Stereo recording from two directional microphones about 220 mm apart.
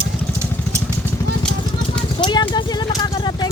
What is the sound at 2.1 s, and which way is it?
Clip-clop, 20° left (ahead or behind).